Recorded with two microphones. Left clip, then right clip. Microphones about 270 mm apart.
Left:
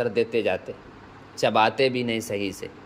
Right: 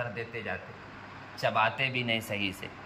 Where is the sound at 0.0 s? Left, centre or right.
Left.